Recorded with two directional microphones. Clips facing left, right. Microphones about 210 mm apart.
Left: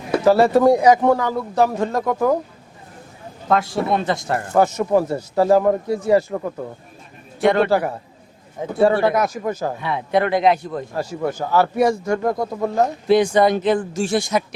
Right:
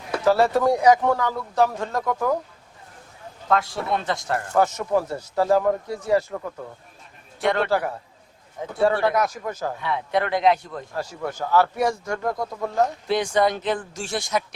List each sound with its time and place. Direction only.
0.0 s a sound: 10° left (ahead or behind)
0.8 s a man's voice: 10° left (ahead or behind)
3.4 s a man's voice: 10° left (ahead or behind)
6.3 s speech: 25° left (ahead or behind)
7.4 s a man's voice: 10° left (ahead or behind)
12.3 s speech: 30° left (ahead or behind)
12.6 s a man's voice: 10° left (ahead or behind)